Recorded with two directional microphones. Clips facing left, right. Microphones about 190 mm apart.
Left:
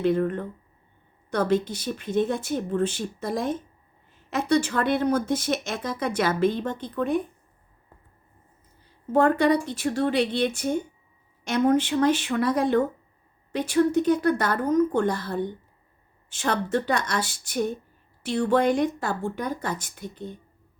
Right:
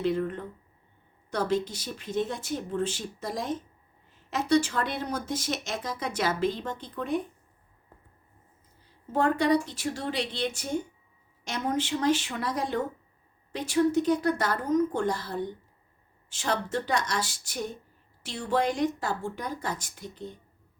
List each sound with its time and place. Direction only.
0.0 s speech: 60° left (ahead or behind)
9.1 s speech: 55° left (ahead or behind)